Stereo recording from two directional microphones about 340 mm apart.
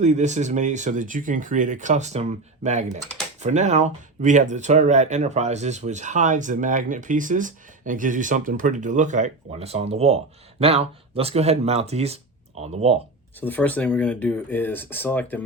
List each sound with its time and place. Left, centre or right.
0.0 s speech: centre
13.4 s speech: centre